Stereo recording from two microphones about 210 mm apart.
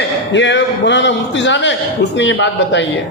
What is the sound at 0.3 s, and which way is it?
A man's voice, 60° left (ahead or behind).